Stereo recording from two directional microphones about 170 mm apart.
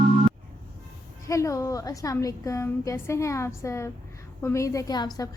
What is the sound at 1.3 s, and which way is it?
A woman's voice, 20° left (ahead or behind).